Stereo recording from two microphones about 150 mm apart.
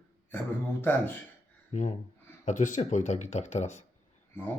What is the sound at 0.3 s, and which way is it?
Speech, 15° left (ahead or behind).